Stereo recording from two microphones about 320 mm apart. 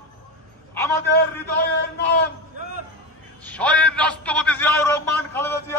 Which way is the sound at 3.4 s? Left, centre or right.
Centre.